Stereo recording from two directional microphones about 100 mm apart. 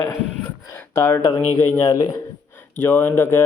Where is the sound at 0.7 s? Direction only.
25° left (ahead or behind).